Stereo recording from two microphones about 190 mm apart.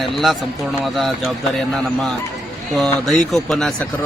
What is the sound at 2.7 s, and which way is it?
Speech, centre (ahead or behind).